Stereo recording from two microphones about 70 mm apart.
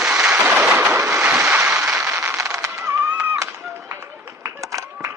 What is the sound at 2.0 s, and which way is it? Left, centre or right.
Fireworks, right.